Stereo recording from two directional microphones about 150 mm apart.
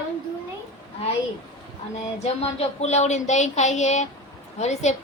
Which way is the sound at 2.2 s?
45° left (ahead or behind).